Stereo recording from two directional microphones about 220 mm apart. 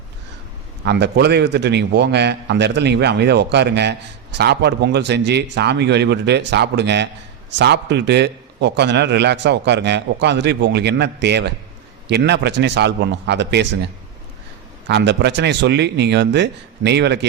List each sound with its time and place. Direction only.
0.9 s a man's voice: 50° right (ahead or behind)